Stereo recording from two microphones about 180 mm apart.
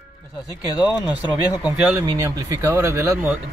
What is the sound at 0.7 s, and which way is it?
Speech, 5° right (ahead or behind).